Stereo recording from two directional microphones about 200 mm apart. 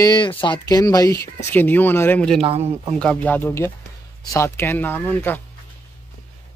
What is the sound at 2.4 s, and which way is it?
Speech, 30° right (ahead or behind).